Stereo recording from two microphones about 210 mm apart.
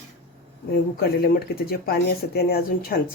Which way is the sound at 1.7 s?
45° left (ahead or behind).